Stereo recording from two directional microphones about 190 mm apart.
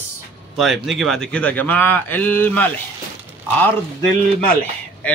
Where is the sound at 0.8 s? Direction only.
Centre (ahead or behind).